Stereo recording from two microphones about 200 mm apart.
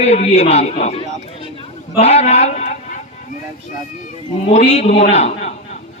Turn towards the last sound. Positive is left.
turn(degrees=35)  # may be behind; listen again after turning